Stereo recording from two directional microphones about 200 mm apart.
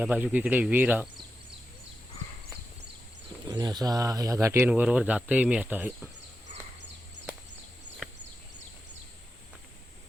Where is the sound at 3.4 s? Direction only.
20° right (ahead or behind).